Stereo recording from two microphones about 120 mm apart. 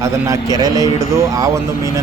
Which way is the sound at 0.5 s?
30° right (ahead or behind).